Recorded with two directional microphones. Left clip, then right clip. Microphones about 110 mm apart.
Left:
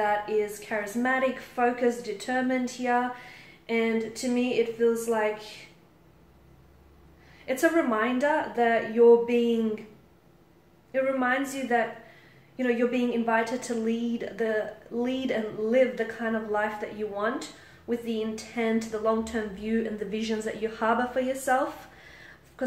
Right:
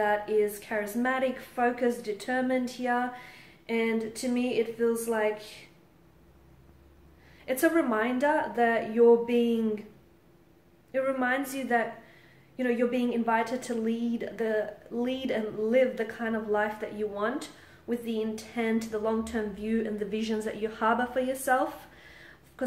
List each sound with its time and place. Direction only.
0.0 s a woman's voice: 50° right (ahead or behind)
7.4 s a woman's voice: 50° right (ahead or behind)
10.9 s a woman's voice: 50° right (ahead or behind)